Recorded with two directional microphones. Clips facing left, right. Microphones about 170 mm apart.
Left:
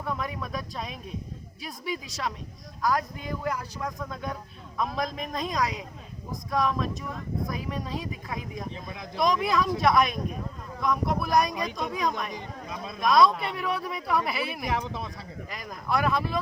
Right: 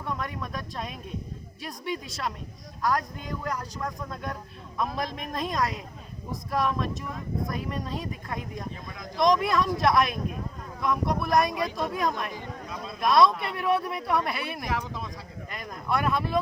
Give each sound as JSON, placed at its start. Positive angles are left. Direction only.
{"t": 0.1, "sound": "speech", "side_deg": 0}
{"t": 8.7, "sound": "speech", "side_deg": 25}
{"t": 9.1, "sound": "speech", "side_deg": 0}
{"t": 14.8, "sound": "speech", "side_deg": 20}
{"t": 15.4, "sound": "speech", "side_deg": 0}